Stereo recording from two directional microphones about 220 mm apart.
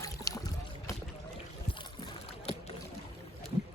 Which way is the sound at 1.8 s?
20° left (ahead or behind).